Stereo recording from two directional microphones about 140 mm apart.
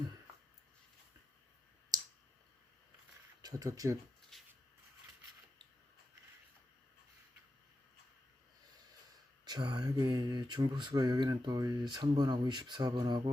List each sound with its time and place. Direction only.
3.4 s speech: 25° right (ahead or behind)
4.3 s shuffle: centre (ahead or behind)
9.4 s speech: 30° right (ahead or behind)